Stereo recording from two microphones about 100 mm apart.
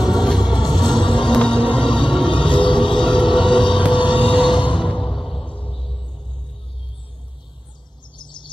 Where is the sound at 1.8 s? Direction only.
55° left (ahead or behind).